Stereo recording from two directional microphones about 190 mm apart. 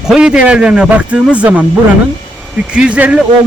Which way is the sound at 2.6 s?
5° right (ahead or behind).